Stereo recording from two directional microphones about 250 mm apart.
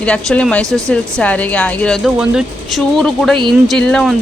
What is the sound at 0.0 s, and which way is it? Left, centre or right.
A woman's voice, centre.